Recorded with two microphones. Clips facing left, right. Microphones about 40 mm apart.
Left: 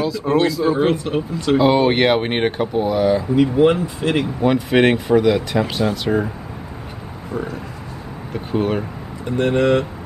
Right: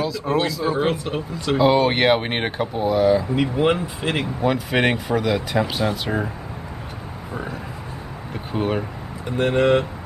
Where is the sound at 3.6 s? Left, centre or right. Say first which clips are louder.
Left 4 dB; centre.